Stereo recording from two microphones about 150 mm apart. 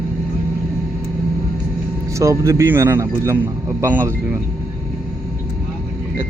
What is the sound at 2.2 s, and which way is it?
A man's voice, 20° right (ahead or behind).